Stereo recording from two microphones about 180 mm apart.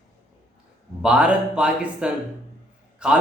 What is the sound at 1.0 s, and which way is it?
Speech, 5° right (ahead or behind).